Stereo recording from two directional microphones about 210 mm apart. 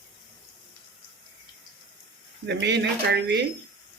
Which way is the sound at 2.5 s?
55° right (ahead or behind).